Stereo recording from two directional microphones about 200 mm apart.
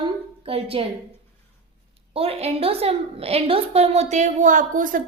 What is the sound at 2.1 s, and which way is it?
A woman's voice, 30° right (ahead or behind).